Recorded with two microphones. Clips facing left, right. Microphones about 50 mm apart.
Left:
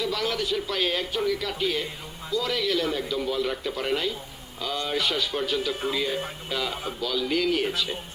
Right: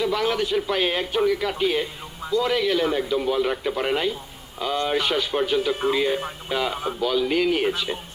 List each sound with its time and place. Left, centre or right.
0.0 s a man's voice: right